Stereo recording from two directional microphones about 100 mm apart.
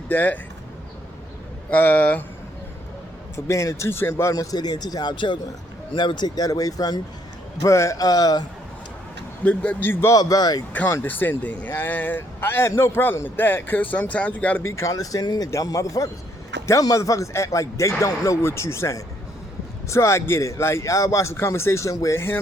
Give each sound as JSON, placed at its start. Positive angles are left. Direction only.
{"t": 0.1, "sound": "speech", "side_deg": 15}
{"t": 1.7, "sound": "speech", "side_deg": 15}
{"t": 3.3, "sound": "speech", "side_deg": 30}
{"t": 4.5, "sound": "speech", "side_deg": 45}
{"t": 9.4, "sound": "speech", "side_deg": 15}
{"t": 10.1, "sound": "speech", "side_deg": 40}
{"t": 10.7, "sound": "speech", "side_deg": 20}
{"t": 14.6, "sound": "speech", "side_deg": 30}